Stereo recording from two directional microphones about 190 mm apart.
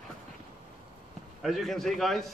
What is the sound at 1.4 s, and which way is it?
Speech, centre (ahead or behind).